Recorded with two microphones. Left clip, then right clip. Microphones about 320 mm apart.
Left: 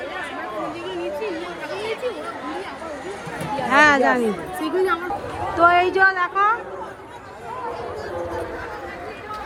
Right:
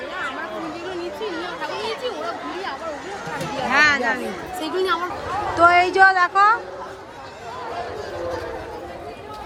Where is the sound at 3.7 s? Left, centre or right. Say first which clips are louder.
Left 2 dB; centre.